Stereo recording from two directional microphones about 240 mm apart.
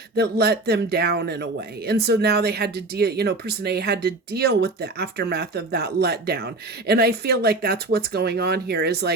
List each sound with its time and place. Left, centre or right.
0.2 s speech: right